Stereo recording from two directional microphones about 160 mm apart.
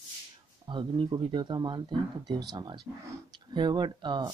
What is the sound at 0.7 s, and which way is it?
Speech, 30° right (ahead or behind).